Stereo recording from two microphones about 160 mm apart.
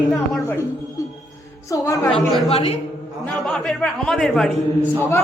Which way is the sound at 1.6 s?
20° left (ahead or behind).